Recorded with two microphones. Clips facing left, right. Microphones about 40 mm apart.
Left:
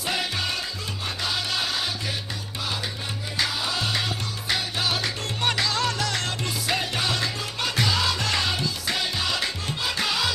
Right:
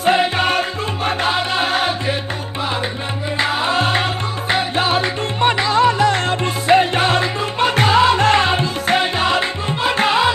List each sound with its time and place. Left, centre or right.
0.0 s music: right
3.3 s music: right